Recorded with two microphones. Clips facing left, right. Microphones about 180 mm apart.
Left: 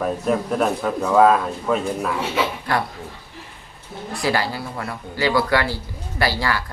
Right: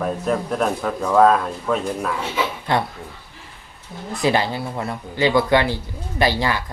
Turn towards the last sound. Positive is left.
turn(degrees=-20)  # may be behind; listen again after turning